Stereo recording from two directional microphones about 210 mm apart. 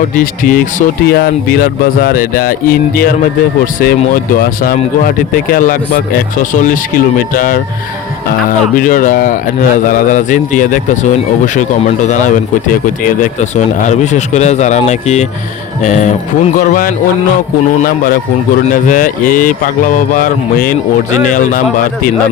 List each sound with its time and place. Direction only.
0.2 s speech: 40° left (ahead or behind)